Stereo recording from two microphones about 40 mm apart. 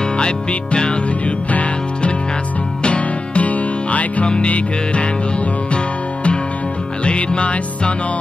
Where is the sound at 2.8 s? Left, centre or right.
Left.